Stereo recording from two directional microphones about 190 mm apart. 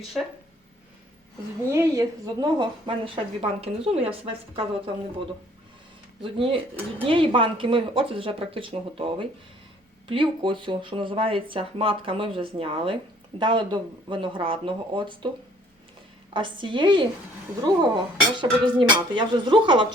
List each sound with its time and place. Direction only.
1.7 s speech: 15° right (ahead or behind)
6.2 s speech: 30° right (ahead or behind)
16.3 s speech: 25° right (ahead or behind)